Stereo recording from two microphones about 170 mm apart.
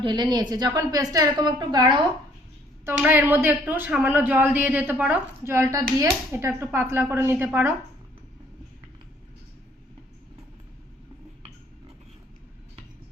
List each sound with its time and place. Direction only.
0.0 s a woman's voice: 25° right (ahead or behind)
2.8 s speech: 10° right (ahead or behind)